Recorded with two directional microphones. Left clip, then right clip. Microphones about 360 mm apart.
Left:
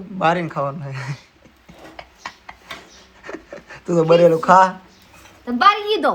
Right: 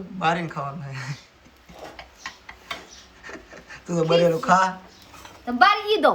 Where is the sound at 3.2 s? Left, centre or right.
Centre.